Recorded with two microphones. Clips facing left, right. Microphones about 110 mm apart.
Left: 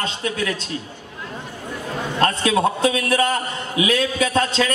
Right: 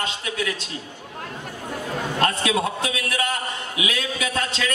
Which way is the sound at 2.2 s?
35° left (ahead or behind).